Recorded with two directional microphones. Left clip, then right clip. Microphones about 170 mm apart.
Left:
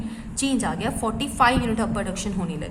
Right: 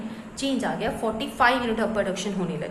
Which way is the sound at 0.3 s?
45° left (ahead or behind).